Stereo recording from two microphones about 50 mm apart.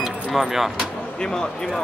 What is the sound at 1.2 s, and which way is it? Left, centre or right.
Speech, centre.